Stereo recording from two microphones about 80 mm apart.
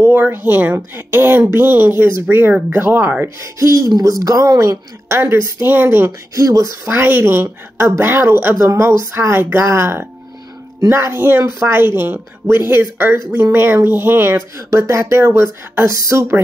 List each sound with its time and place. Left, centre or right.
0.0 s speech: right
3.3 s a woman's voice: right
6.3 s a woman's voice: right
6.9 s speech: right